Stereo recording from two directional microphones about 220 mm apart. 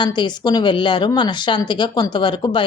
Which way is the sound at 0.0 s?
20° left (ahead or behind).